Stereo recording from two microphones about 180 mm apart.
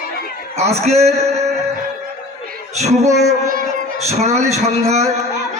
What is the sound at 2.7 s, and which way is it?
Speech, 40° right (ahead or behind).